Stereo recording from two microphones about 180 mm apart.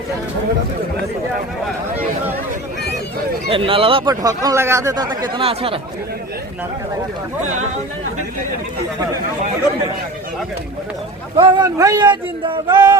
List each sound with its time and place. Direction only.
3.5 s speech: 30° right (ahead or behind)
11.3 s speech: 20° right (ahead or behind)